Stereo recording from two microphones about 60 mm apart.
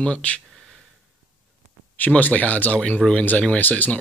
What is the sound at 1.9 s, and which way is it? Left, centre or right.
Speech, left.